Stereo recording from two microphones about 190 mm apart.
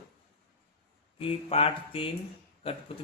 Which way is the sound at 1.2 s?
30° left (ahead or behind).